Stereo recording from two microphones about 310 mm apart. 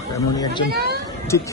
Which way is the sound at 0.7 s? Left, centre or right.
Right.